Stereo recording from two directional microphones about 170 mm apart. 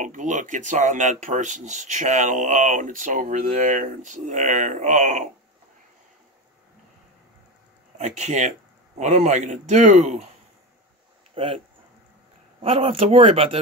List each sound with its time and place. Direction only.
0.0 s speech: 45° right (ahead or behind)
8.0 s speech: 45° right (ahead or behind)
11.3 s speech: 35° right (ahead or behind)
12.6 s speech: 35° right (ahead or behind)